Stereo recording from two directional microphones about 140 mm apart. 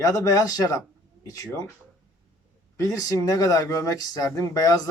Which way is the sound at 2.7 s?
25° left (ahead or behind).